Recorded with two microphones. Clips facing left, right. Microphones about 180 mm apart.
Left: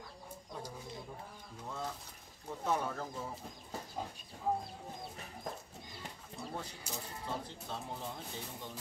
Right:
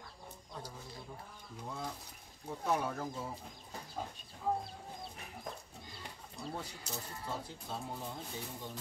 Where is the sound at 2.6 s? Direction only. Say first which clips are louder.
Right 1 dB; 10° right (ahead or behind).